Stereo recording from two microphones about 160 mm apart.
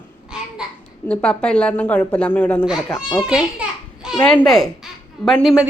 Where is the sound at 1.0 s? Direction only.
5° left (ahead or behind).